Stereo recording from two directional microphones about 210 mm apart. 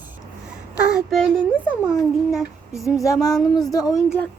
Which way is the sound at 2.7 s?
15° left (ahead or behind).